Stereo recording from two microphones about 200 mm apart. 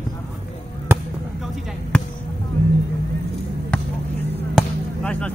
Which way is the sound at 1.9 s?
5° left (ahead or behind).